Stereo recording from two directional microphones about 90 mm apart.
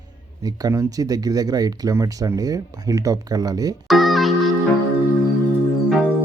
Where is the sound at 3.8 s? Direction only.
Centre (ahead or behind).